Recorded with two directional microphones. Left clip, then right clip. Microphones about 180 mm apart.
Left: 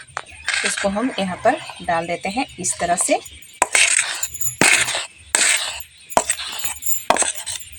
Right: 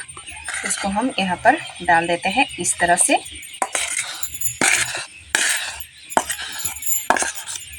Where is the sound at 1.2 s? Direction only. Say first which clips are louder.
Right 3 dB; 30° left (ahead or behind).